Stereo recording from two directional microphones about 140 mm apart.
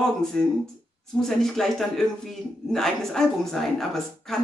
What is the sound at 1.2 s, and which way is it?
A woman's voice, centre (ahead or behind).